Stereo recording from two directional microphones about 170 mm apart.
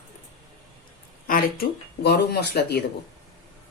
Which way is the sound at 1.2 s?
60° left (ahead or behind).